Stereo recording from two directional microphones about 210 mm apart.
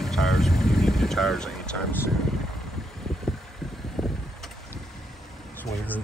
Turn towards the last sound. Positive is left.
turn(degrees=10)  # may be behind; listen again after turning